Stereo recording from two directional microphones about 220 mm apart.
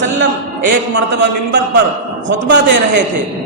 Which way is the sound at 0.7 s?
50° right (ahead or behind).